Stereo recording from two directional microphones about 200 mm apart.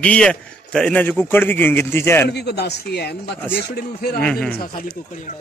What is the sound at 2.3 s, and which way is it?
A man's voice, 55° left (ahead or behind).